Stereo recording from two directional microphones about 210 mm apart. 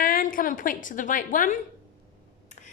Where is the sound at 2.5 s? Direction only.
35° left (ahead or behind).